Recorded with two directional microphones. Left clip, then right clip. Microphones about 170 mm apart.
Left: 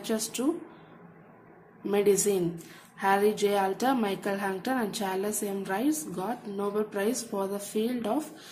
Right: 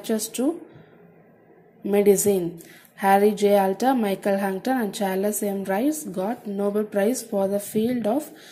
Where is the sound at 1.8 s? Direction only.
25° right (ahead or behind).